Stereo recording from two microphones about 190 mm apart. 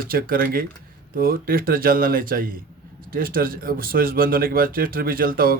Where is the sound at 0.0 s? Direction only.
50° right (ahead or behind).